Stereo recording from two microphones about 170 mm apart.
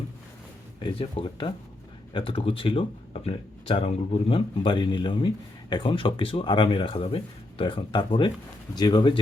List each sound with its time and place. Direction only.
0.8 s speech: 30° left (ahead or behind)